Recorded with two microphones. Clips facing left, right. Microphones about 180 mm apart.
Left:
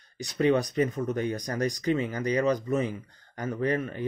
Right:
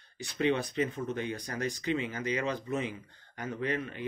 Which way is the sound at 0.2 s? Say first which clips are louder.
Left 5 dB; 40° left (ahead or behind).